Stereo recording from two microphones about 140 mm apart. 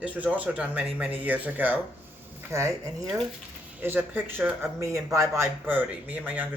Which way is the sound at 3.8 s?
15° right (ahead or behind).